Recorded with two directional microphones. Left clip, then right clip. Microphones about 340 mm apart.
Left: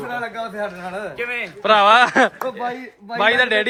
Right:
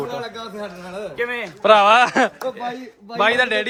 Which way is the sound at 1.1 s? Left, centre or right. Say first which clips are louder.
Right 2 dB; right.